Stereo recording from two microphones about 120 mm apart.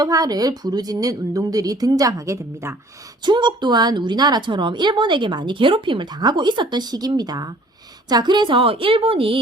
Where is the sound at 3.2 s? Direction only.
40° right (ahead or behind).